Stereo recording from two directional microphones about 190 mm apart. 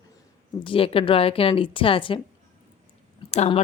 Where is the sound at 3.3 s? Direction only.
35° left (ahead or behind).